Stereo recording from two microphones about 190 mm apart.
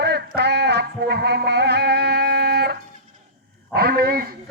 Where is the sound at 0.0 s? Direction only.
60° right (ahead or behind).